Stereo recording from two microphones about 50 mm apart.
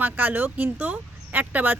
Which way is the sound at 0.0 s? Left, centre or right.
Right.